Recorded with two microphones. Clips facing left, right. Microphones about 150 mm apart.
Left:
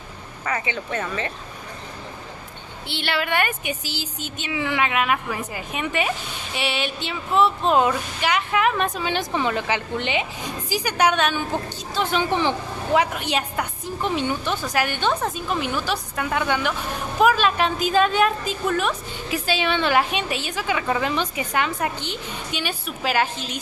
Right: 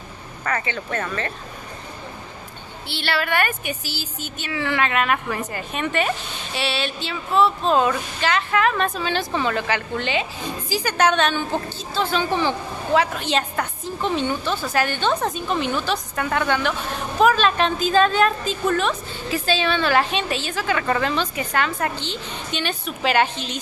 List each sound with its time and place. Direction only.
0.5 s speech: 15° left (ahead or behind)
2.9 s speech: 20° left (ahead or behind)